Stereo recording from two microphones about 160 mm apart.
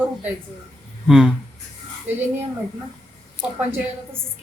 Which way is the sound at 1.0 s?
5° right (ahead or behind).